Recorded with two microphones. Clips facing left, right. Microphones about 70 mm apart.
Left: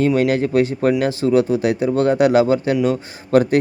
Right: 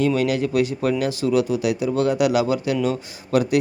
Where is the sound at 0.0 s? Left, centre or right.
Left.